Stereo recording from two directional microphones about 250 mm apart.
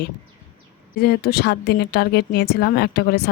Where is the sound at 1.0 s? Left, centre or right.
Left.